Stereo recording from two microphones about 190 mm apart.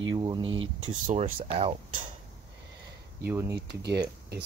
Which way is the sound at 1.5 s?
30° right (ahead or behind).